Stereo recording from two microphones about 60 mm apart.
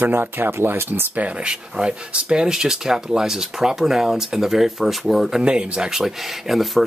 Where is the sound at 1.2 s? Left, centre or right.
Centre.